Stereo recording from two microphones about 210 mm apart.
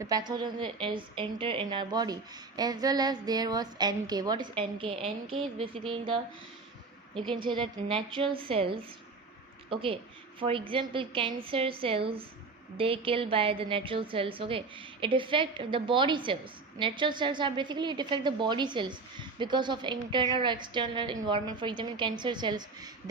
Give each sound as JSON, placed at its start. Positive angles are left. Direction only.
{"t": 0.0, "sound": "a woman's voice", "side_deg": -20}
{"t": 7.2, "sound": "a woman's voice", "side_deg": -25}